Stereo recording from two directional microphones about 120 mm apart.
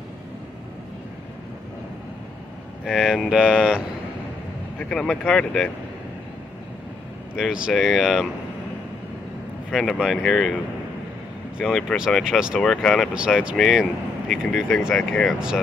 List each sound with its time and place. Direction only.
2.8 s speech: 5° right (ahead or behind)
4.7 s speech: 5° left (ahead or behind)
7.3 s speech: 5° right (ahead or behind)
9.7 s speech: 5° left (ahead or behind)
11.6 s speech: centre (ahead or behind)
12.5 s speech: 5° left (ahead or behind)
13.1 s speech: 10° right (ahead or behind)